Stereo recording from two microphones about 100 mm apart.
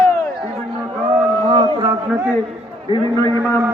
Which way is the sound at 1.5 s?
50° right (ahead or behind).